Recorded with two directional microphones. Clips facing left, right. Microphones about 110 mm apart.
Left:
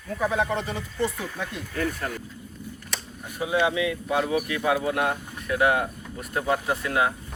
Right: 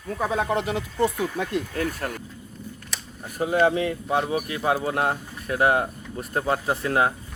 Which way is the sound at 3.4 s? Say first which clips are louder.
Right 3 dB; 45° right (ahead or behind).